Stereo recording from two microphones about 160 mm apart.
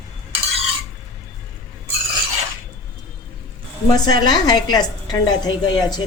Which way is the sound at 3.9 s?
25° left (ahead or behind).